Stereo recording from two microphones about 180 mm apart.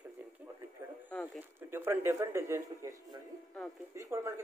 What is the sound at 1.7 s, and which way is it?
Speech, 15° right (ahead or behind).